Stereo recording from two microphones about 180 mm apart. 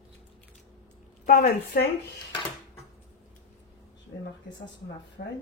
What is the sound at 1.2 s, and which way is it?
Speech, 55° left (ahead or behind).